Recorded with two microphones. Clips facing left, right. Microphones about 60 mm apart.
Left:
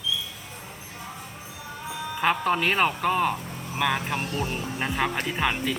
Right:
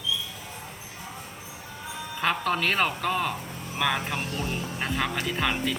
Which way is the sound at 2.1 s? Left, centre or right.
Centre.